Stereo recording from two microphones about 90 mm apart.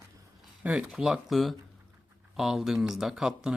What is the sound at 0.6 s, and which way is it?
Speech, 15° right (ahead or behind).